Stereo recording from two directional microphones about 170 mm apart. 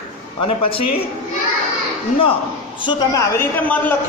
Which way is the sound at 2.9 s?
20° left (ahead or behind).